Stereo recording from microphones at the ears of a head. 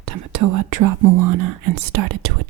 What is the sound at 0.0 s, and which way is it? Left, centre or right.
Speech, right.